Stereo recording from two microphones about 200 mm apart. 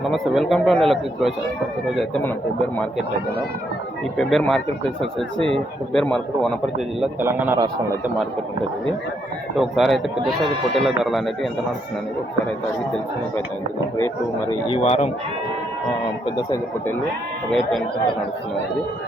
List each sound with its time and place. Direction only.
0.1 s speech: centre (ahead or behind)
4.2 s speech: centre (ahead or behind)
7.0 s a man's voice: 10° right (ahead or behind)
9.6 s speech: centre (ahead or behind)
14.7 s a man's voice: 30° left (ahead or behind)
16.2 s speech: 15° left (ahead or behind)
17.5 s speech: centre (ahead or behind)